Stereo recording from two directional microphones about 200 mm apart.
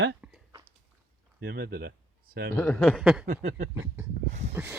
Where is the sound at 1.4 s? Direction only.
55° right (ahead or behind).